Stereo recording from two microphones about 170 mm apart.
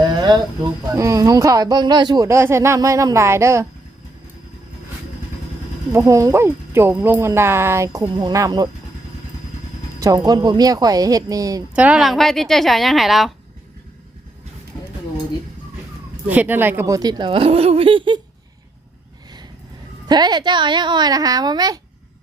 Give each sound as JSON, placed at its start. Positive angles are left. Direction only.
{"t": 0.0, "sound": "speech", "side_deg": -25}
{"t": 5.9, "sound": "speech", "side_deg": -15}
{"t": 10.0, "sound": "speech", "side_deg": -20}
{"t": 11.7, "sound": "a woman's voice", "side_deg": -5}
{"t": 16.3, "sound": "speech", "side_deg": -10}
{"t": 20.1, "sound": "speech", "side_deg": -25}